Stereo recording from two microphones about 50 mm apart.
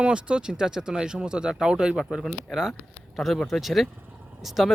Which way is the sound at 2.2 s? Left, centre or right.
Centre.